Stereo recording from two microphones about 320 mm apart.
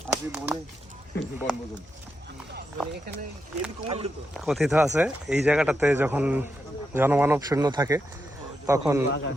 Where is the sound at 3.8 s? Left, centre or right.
Centre.